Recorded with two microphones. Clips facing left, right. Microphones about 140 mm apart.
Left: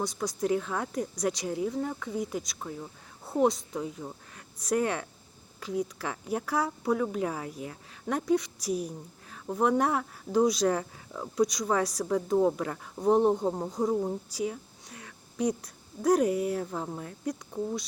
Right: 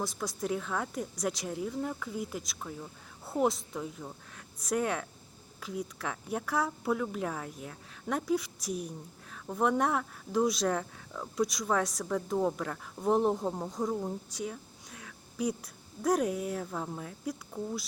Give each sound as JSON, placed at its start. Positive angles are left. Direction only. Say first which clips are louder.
{"t": 0.0, "sound": "speech", "louder": "left 4 dB", "side_deg": 0}
{"t": 2.6, "sound": "a sound", "louder": "left 3 dB", "side_deg": 15}
{"t": 3.3, "sound": "speech", "louder": "left 4 dB", "side_deg": 0}
{"t": 13.8, "sound": "speech", "louder": "left 5 dB", "side_deg": 20}
{"t": 14.3, "sound": "a sound", "louder": "left 5 dB", "side_deg": 0}
{"t": 16.0, "sound": "speech", "louder": "left 5 dB", "side_deg": 0}